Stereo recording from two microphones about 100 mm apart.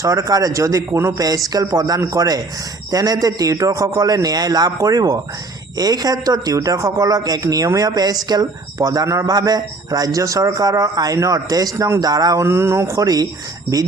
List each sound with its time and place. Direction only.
0.0 s a man's voice: 35° right (ahead or behind)
12.5 s speech: 25° right (ahead or behind)